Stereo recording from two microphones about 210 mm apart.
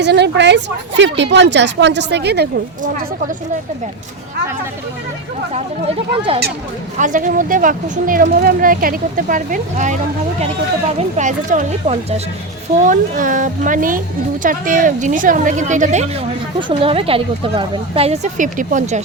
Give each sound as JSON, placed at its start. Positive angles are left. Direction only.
{"t": 0.0, "sound": "speech", "side_deg": -55}
{"t": 7.0, "sound": "speech", "side_deg": -40}
{"t": 11.2, "sound": "speech", "side_deg": -35}
{"t": 16.6, "sound": "speech", "side_deg": -25}